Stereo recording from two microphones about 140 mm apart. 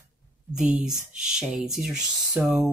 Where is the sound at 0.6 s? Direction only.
5° right (ahead or behind).